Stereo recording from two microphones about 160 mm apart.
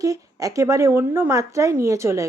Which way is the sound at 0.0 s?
20° right (ahead or behind).